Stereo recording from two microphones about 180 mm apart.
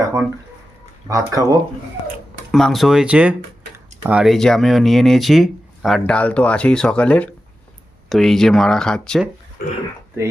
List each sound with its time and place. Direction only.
1.0 s speech: 20° right (ahead or behind)
2.5 s speech: centre (ahead or behind)
9.6 s speech: 60° left (ahead or behind)